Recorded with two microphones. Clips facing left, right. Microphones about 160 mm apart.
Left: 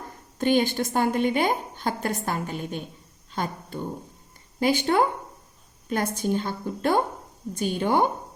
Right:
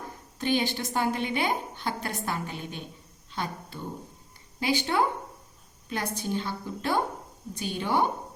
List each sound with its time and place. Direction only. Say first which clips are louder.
0.3 s a woman's voice: left 5 dB; 50° left (ahead or behind)